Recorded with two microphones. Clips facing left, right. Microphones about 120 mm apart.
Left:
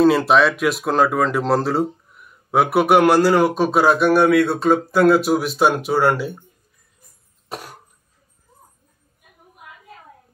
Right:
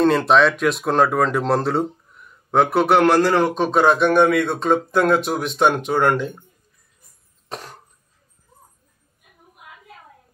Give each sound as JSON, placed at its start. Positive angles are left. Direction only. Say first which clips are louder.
{"t": 0.0, "sound": "speech", "louder": "left 1 dB", "side_deg": 5}
{"t": 7.4, "sound": "cough", "louder": "left 1 dB", "side_deg": 10}